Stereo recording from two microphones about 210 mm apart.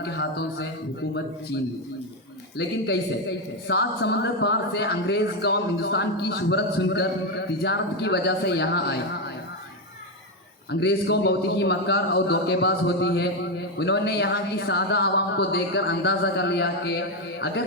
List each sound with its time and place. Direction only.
0.0 s a man's voice: 55° left (ahead or behind)
2.6 s a man's voice: 55° left (ahead or behind)
10.7 s a man's voice: 55° left (ahead or behind)